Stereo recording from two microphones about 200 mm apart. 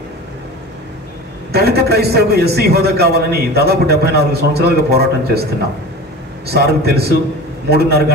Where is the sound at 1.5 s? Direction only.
50° right (ahead or behind).